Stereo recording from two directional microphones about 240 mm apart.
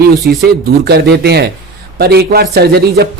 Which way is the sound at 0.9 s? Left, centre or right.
Right.